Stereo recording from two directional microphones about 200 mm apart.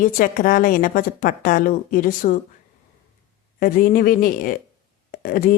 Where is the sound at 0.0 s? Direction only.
45° left (ahead or behind).